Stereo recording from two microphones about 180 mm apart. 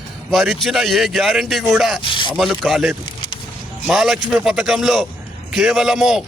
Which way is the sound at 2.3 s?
Centre (ahead or behind).